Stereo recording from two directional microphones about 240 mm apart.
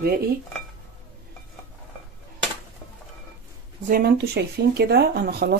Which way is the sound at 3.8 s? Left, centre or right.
Right.